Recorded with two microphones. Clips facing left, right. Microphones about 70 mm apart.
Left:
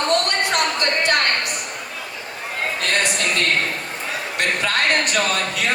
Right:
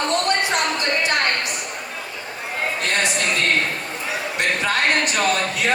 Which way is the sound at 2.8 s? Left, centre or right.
Left.